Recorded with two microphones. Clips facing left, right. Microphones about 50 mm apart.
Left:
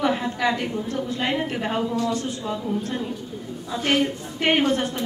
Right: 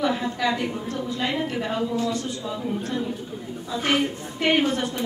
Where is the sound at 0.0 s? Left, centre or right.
Left.